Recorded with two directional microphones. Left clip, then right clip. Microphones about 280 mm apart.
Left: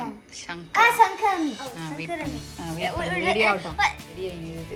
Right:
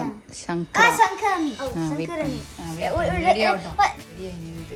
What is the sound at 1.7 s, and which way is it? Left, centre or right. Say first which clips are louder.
Speech: right 7 dB; centre.